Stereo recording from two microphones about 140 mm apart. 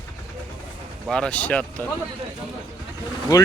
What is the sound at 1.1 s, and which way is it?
Speech, 5° left (ahead or behind).